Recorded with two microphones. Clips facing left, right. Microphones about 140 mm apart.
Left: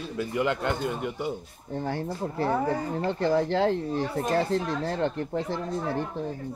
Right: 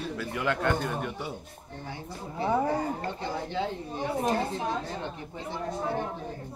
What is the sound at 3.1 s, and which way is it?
Speech, 70° left (ahead or behind).